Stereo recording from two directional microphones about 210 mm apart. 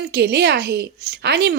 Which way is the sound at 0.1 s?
50° right (ahead or behind).